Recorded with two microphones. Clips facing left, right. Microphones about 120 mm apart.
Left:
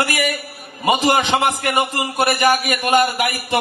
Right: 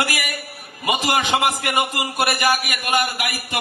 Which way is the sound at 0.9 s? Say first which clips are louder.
Left 4 dB; 35° left (ahead or behind).